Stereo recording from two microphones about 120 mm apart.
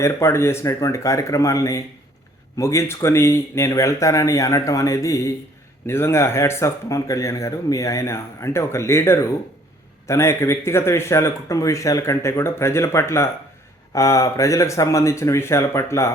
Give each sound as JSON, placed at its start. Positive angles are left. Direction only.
{"t": 0.0, "sound": "speech", "side_deg": 25}